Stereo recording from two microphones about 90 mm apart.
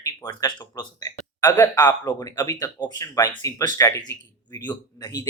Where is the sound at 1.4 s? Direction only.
45° left (ahead or behind).